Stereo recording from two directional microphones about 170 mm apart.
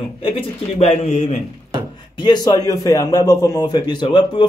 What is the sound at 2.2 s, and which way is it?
A man's voice, 25° left (ahead or behind).